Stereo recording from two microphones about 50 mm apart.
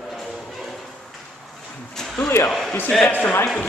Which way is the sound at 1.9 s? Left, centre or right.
Centre.